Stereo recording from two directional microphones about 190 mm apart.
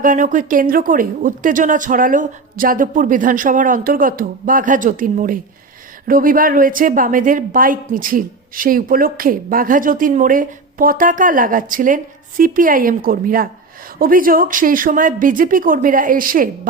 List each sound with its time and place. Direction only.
0.0 s speech: 45° right (ahead or behind)